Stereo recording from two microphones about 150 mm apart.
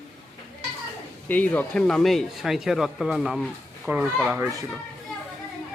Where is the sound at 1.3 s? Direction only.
10° left (ahead or behind).